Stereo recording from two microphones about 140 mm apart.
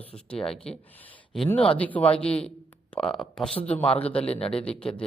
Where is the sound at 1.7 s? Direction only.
10° left (ahead or behind).